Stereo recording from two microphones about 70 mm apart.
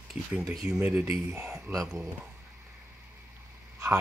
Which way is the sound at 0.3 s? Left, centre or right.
Centre.